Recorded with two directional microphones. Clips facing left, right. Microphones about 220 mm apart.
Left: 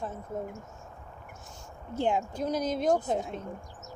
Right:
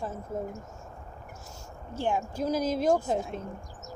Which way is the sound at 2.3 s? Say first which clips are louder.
Right 2 dB; centre (ahead or behind).